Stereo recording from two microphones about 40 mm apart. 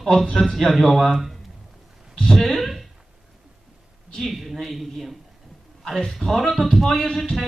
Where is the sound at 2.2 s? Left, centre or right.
Centre.